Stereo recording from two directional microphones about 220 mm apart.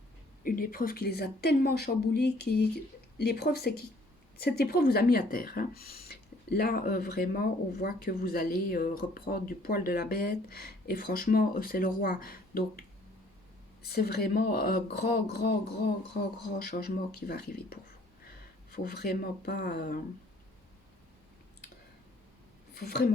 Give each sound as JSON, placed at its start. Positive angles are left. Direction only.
{"t": 0.4, "sound": "speech", "side_deg": 40}
{"t": 13.8, "sound": "speech", "side_deg": 45}
{"t": 22.7, "sound": "speech", "side_deg": 45}